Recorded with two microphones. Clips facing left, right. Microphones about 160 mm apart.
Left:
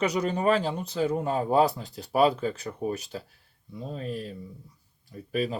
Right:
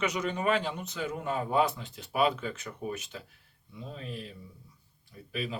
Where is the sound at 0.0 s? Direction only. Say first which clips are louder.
Left 5 dB; 35° left (ahead or behind).